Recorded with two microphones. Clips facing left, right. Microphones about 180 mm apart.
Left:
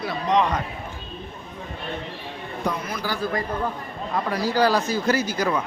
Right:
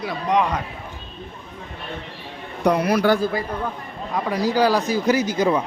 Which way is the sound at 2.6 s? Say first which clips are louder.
Right 10 dB; 70° right (ahead or behind).